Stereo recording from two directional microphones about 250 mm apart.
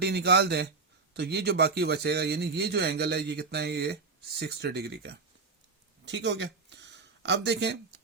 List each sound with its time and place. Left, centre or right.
0.0 s speech: right